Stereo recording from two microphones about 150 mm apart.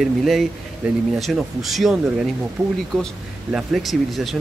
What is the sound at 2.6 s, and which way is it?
Speech, 20° right (ahead or behind).